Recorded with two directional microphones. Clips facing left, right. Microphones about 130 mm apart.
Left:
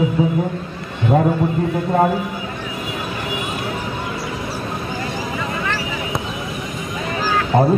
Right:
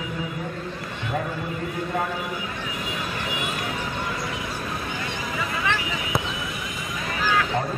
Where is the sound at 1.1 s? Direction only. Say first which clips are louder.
Left 13 dB; 45° left (ahead or behind).